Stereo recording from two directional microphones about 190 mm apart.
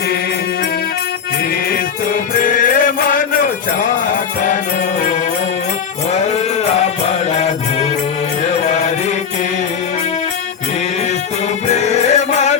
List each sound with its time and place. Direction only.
2.4 s music: 45° left (ahead or behind)
7.3 s music: 35° left (ahead or behind)
11.7 s music: 35° left (ahead or behind)